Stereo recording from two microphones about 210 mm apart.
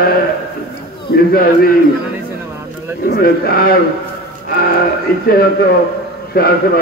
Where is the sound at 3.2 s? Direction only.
45° left (ahead or behind).